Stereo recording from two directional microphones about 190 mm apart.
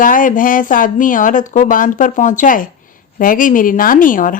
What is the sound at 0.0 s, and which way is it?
A woman's voice, 45° left (ahead or behind).